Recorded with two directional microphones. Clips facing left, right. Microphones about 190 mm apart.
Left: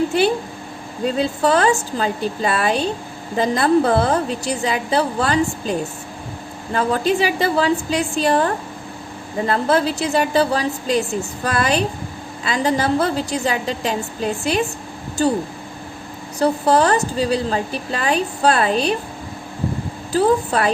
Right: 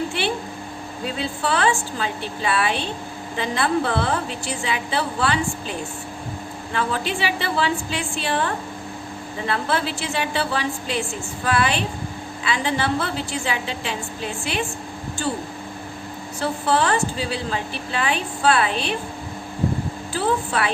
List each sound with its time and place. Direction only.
1.0 s a woman's voice: 40° left (ahead or behind)
6.7 s a woman's voice: 40° left (ahead or behind)
16.4 s a woman's voice: 40° left (ahead or behind)
20.1 s a woman's voice: 40° left (ahead or behind)